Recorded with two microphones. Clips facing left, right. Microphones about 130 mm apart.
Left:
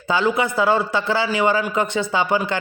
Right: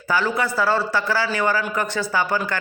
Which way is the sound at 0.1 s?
20° left (ahead or behind).